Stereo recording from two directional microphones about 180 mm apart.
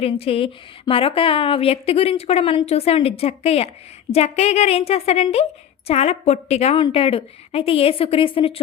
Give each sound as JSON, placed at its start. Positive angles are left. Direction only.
{"t": 0.0, "sound": "a woman's voice", "side_deg": 30}